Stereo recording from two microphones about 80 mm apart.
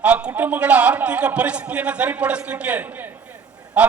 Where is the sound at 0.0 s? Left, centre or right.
Centre.